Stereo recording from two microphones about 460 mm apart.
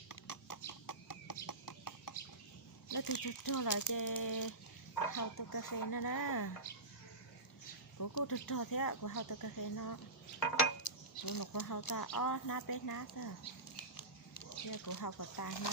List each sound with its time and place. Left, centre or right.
0.1 s clip-clop: left
2.9 s speech: left
7.9 s speech: left
11.3 s speech: left
13.7 s a sound: left